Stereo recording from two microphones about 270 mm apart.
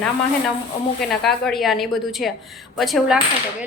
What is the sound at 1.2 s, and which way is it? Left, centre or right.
Speech, centre.